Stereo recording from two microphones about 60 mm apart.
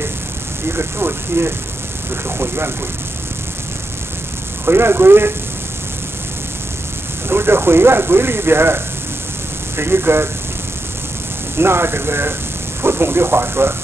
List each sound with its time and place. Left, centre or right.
0.7 s speech: right
4.6 s speech: right
7.2 s speech: right
11.5 s speech: right